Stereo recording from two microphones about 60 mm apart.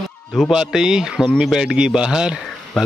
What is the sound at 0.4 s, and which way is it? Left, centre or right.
A man's voice, centre.